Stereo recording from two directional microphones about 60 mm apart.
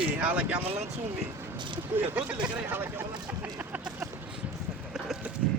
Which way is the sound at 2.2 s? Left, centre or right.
Right.